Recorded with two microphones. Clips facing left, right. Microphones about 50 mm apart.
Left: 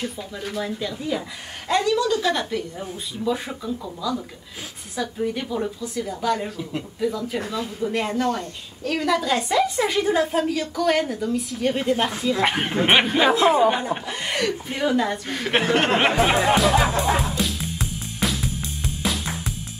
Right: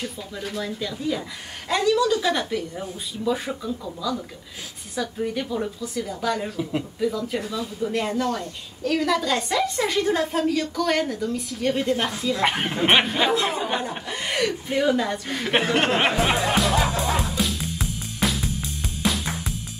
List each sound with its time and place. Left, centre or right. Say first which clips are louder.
0.4 s a woman's voice: left 1 dB; centre
7.4 s speech: left 1 dB; left
7.8 s a woman's voice: left 1 dB; centre
8.8 s a woman's voice: even; centre
12.1 s speech: left 2 dB; centre
12.4 s speech: left 1 dB; centre
17.4 s music: even; centre